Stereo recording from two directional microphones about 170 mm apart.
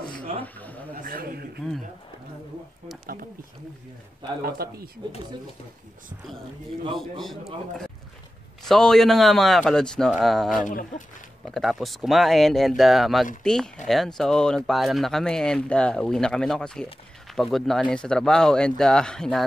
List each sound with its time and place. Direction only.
0.4 s a sound: 10° left (ahead or behind)
1.0 s a sound: 60° right (ahead or behind)
4.4 s speech: 65° right (ahead or behind)
7.0 s speech: centre (ahead or behind)
8.6 s speech: 5° left (ahead or behind)
10.5 s speech: 50° left (ahead or behind)
11.4 s speech: centre (ahead or behind)